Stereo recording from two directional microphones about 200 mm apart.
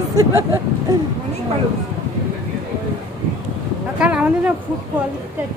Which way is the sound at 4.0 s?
5° right (ahead or behind).